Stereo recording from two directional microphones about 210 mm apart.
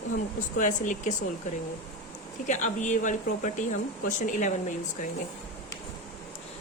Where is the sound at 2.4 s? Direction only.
35° left (ahead or behind).